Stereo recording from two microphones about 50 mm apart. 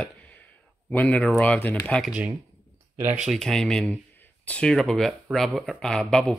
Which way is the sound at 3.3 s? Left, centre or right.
Centre.